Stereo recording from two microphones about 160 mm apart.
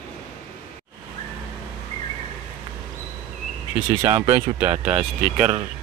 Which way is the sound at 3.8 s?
15° right (ahead or behind).